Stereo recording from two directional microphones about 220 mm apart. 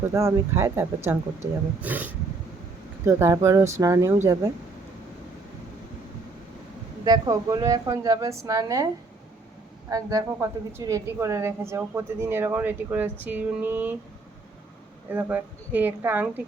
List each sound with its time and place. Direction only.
0.1 s a woman's voice: 15° right (ahead or behind)
7.0 s a woman's voice: 15° right (ahead or behind)
9.9 s a woman's voice: 15° right (ahead or behind)
15.1 s a woman's voice: 10° right (ahead or behind)